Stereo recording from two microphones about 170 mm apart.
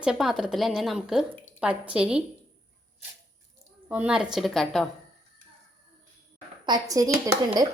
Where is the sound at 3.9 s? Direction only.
5° right (ahead or behind).